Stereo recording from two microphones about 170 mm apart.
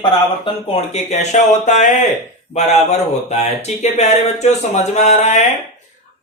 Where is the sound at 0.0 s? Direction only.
30° left (ahead or behind).